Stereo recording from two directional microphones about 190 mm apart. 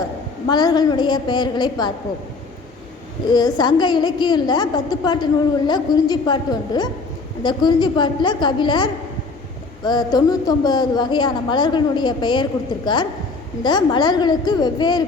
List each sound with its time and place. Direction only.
0.4 s a woman's voice: 20° left (ahead or behind)
3.2 s a woman's voice: 20° left (ahead or behind)